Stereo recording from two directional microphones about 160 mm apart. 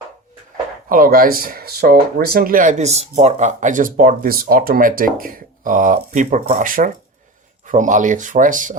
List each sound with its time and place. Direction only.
0.9 s speech: 65° right (ahead or behind)